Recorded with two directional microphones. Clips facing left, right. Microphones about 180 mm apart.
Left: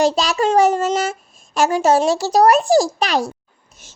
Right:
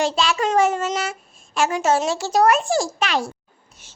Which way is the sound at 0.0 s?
40° left (ahead or behind).